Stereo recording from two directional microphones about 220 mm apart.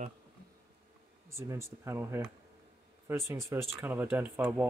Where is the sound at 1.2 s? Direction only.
10° right (ahead or behind).